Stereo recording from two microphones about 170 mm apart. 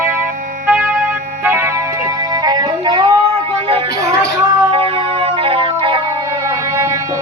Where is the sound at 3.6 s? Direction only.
30° right (ahead or behind).